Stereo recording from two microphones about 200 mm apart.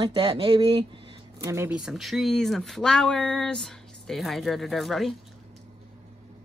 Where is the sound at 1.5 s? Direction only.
10° right (ahead or behind).